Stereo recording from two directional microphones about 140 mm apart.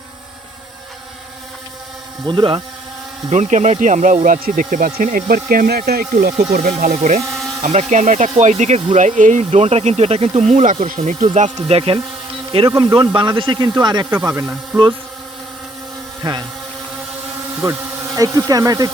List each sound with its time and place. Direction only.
2.2 s speech: 35° right (ahead or behind)
3.2 s speech: 60° right (ahead or behind); by 6.3 s 90° right
6.6 s speech: 75° right (ahead or behind)
6.9 s speech: 55° right (ahead or behind)
12.5 s speech: 35° right (ahead or behind)
16.2 s speech: 35° right (ahead or behind)
17.6 s speech: 20° right (ahead or behind)